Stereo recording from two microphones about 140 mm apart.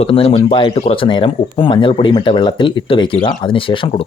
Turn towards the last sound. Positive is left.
turn(degrees=35)  # may be behind; listen again after turning